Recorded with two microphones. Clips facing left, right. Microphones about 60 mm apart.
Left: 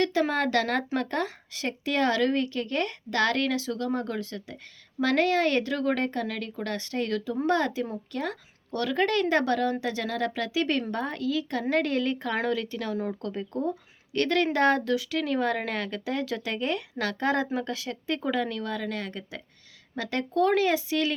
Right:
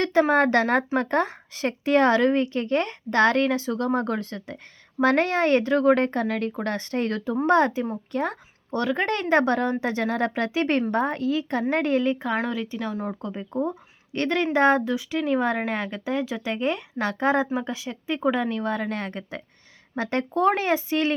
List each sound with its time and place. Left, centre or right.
0.0 s a woman's voice: right; by 18.2 s centre
18.2 s a woman's voice: right